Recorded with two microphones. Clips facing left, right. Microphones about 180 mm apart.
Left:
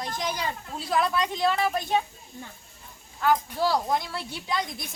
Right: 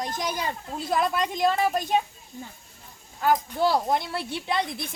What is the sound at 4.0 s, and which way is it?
Speech, 60° right (ahead or behind).